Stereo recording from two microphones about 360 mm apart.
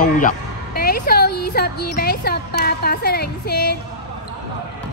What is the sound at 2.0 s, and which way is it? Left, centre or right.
Speech, left.